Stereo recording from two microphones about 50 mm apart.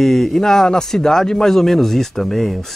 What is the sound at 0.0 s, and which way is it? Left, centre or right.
A man's voice, centre.